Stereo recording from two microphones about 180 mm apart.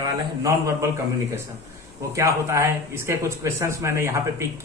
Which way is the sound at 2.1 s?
15° right (ahead or behind).